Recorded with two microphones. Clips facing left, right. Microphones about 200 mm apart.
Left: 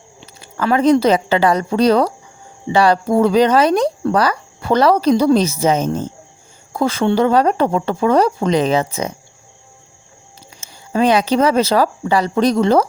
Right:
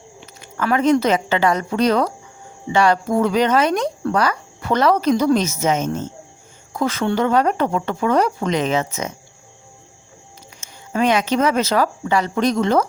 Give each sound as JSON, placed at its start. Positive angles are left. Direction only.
{"t": 0.2, "sound": "a woman's voice", "side_deg": 35}
{"t": 10.6, "sound": "speech", "side_deg": 35}